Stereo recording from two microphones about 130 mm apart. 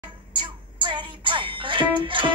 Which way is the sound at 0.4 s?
35° right (ahead or behind).